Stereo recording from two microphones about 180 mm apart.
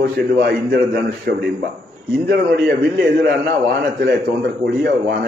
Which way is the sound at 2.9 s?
65° right (ahead or behind).